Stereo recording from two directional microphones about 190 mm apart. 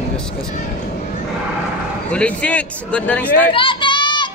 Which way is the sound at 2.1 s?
5° left (ahead or behind).